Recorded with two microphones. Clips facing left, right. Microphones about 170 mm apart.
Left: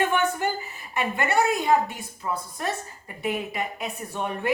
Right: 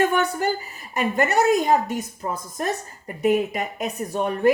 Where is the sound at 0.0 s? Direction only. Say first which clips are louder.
Right 3 dB; 40° right (ahead or behind).